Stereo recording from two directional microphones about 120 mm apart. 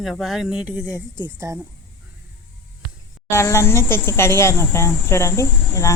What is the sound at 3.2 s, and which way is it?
Speech, 20° left (ahead or behind).